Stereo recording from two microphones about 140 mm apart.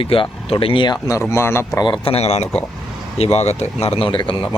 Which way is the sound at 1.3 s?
20° left (ahead or behind).